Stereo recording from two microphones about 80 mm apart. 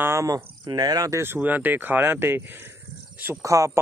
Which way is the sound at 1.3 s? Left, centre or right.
Right.